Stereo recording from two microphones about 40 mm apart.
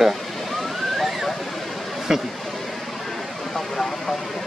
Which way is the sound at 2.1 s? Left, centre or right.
Centre.